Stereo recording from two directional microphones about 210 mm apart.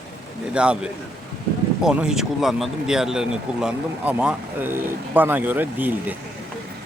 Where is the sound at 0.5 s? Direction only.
5° right (ahead or behind).